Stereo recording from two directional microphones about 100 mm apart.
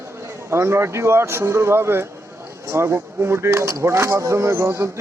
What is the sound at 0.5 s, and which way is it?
Speech, 25° right (ahead or behind).